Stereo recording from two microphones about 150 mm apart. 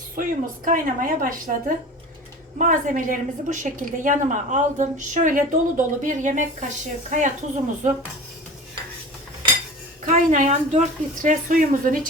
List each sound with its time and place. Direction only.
0.2 s a woman's voice: 65° right (ahead or behind)
2.6 s a woman's voice: 60° right (ahead or behind)
10.1 s a woman's voice: 55° right (ahead or behind)